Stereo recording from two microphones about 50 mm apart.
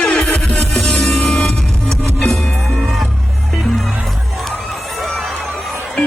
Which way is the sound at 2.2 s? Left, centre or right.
Centre.